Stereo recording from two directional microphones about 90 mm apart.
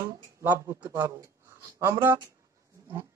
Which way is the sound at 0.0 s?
25° right (ahead or behind).